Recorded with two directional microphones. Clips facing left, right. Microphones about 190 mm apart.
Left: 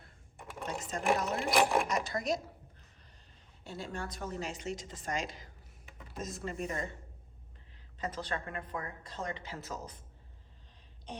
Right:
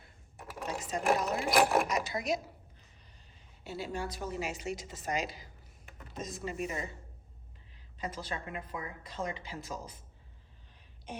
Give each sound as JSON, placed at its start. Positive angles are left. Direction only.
{"t": 0.0, "sound": "speech", "side_deg": 0}
{"t": 3.6, "sound": "a woman's voice", "side_deg": -5}
{"t": 7.9, "sound": "a woman's voice", "side_deg": -10}